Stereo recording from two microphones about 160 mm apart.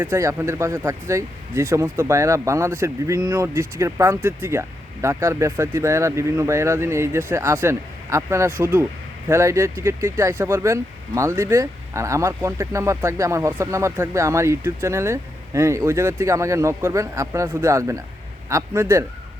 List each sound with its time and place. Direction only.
0.0 s speech: 15° right (ahead or behind)